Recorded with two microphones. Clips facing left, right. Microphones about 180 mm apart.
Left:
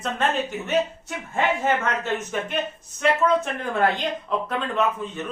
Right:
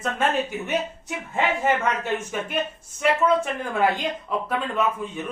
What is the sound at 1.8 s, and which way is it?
Speech, 10° right (ahead or behind).